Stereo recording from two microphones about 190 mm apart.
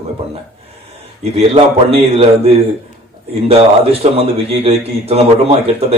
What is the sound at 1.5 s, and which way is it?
Speech, 30° right (ahead or behind).